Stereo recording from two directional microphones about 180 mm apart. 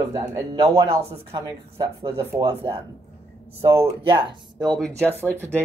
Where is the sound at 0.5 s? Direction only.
20° right (ahead or behind).